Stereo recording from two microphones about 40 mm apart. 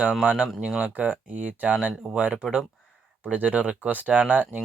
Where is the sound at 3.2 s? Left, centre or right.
Right.